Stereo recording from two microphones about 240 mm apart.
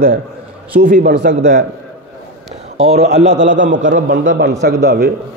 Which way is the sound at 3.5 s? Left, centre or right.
Right.